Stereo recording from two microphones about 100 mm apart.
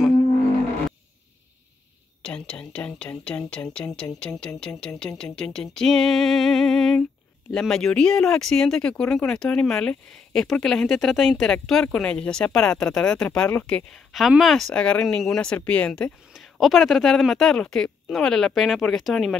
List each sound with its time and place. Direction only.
2.2 s speech: 10° left (ahead or behind)
4.6 s music: 5° left (ahead or behind)
7.5 s speech: 5° left (ahead or behind)
16.3 s music: centre (ahead or behind)